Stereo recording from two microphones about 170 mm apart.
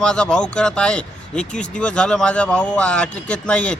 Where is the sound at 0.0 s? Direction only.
5° left (ahead or behind).